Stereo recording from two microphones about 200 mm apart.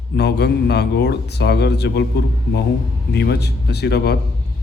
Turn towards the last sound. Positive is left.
turn(degrees=55)  # may be behind; listen again after turning